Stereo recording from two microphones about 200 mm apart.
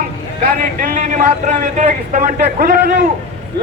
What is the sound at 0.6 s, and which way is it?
A man's voice, 40° right (ahead or behind).